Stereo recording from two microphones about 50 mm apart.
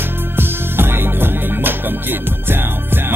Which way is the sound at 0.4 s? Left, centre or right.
Right.